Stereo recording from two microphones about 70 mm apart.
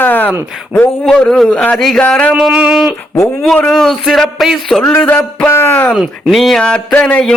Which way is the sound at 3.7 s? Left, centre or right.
Centre.